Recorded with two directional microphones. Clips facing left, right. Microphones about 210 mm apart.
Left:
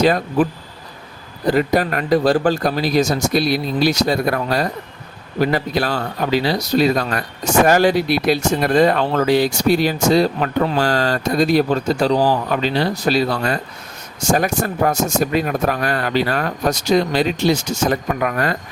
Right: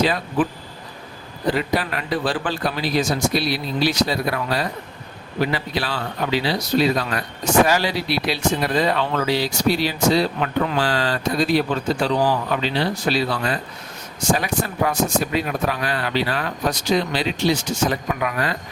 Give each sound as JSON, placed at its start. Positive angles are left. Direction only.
{"t": 0.0, "sound": "speech", "side_deg": 45}
{"t": 1.5, "sound": "speech", "side_deg": 45}